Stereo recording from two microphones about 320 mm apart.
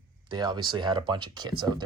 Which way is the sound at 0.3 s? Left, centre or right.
Centre.